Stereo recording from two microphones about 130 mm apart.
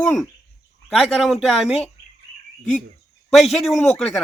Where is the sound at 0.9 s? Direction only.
Centre (ahead or behind).